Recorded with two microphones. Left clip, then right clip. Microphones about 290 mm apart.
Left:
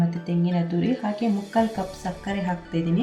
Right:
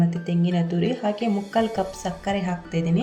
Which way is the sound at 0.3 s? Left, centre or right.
Right.